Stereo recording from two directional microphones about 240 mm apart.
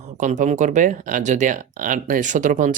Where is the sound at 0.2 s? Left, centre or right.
Right.